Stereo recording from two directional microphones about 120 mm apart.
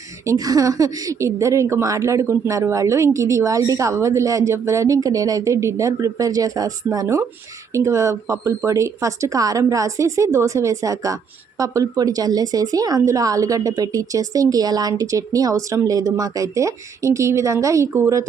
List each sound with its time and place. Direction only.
0.3 s speech: 30° right (ahead or behind)